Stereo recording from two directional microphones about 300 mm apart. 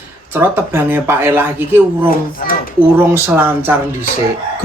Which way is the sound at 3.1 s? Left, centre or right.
Centre.